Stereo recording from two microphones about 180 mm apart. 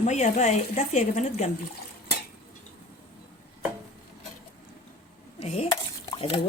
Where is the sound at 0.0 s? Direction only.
40° left (ahead or behind).